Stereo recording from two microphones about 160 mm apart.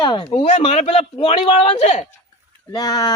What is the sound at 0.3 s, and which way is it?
Speech, 45° left (ahead or behind).